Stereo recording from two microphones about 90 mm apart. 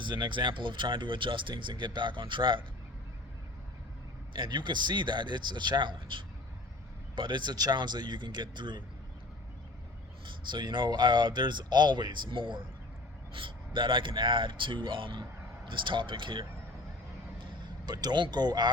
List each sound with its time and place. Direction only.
0.0 s speech: 60° right (ahead or behind)
4.4 s speech: 60° right (ahead or behind)
10.2 s speech: 55° right (ahead or behind)
17.8 s speech: 50° right (ahead or behind)